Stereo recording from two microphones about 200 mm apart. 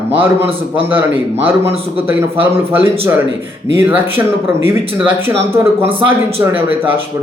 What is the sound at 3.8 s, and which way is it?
A man's voice, 10° right (ahead or behind).